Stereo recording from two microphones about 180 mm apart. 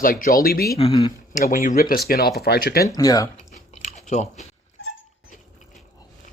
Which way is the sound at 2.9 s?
20° left (ahead or behind).